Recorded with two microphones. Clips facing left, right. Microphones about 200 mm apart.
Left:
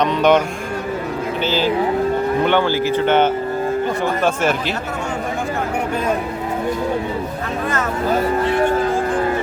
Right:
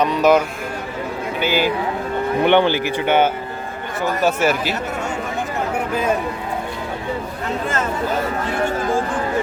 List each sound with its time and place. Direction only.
0.0 s a man's voice: 5° right (ahead or behind)
1.5 s speech: 10° right (ahead or behind)